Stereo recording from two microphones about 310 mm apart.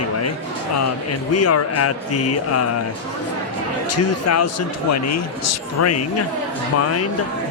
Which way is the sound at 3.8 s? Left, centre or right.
Left.